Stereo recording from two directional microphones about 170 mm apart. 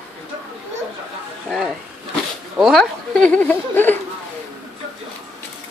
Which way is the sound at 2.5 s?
Centre (ahead or behind).